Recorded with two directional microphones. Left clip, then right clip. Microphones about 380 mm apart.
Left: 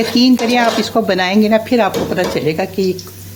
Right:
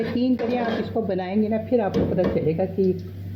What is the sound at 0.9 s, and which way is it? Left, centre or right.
Speech, left.